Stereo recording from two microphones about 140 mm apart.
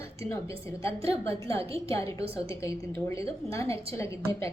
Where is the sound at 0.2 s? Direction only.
20° left (ahead or behind).